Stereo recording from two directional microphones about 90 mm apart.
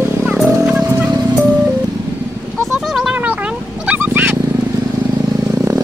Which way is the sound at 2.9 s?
5° right (ahead or behind).